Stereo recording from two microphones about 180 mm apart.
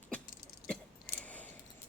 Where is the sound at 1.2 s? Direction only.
10° left (ahead or behind).